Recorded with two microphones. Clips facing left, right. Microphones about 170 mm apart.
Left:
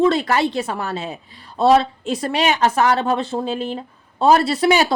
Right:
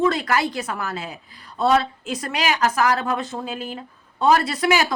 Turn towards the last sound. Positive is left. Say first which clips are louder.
# left 4 dB
turn(degrees=30)  # may be behind; listen again after turning